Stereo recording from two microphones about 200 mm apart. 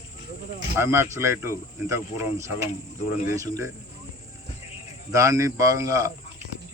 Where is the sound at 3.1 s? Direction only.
15° right (ahead or behind).